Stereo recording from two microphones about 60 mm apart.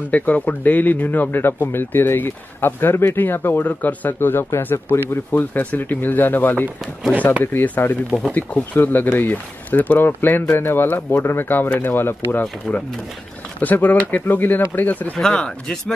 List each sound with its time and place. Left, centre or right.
0.1 s speech: left
12.7 s speech: centre
13.6 s speech: left
15.1 s speech: centre